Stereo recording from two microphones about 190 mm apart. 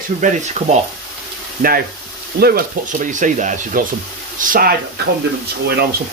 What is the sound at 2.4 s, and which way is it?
Speech, 55° right (ahead or behind).